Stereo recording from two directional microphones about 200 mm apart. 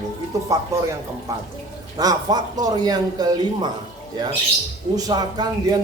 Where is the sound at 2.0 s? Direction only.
20° right (ahead or behind).